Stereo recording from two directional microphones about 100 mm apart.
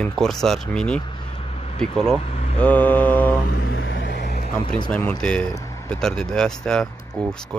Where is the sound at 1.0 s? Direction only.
55° left (ahead or behind); by 1.8 s 80° left.